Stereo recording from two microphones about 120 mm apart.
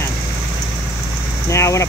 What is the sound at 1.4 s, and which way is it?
Speech, 25° left (ahead or behind).